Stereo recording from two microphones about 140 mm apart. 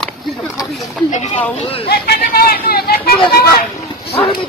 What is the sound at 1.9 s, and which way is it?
Speech, 90° left.